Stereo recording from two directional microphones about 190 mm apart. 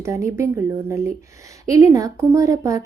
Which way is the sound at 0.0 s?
15° right (ahead or behind).